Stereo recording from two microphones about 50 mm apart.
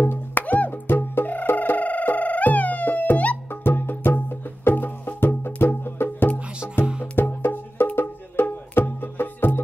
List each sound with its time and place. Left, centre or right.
0.1 s music: left
3.6 s music: left
7.4 s music: left